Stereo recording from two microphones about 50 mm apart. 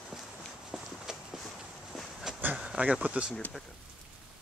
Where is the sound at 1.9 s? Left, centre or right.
Centre.